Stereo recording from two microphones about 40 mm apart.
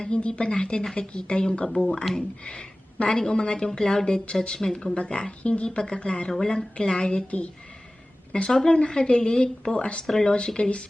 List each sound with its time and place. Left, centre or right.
0.0 s a woman's voice: left
10.0 s speech: centre
10.3 s speech: left